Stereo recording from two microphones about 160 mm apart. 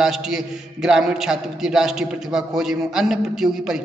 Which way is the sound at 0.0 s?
Centre (ahead or behind).